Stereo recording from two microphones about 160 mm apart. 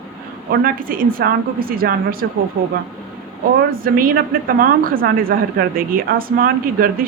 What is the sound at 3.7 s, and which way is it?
Speech, 65° right (ahead or behind).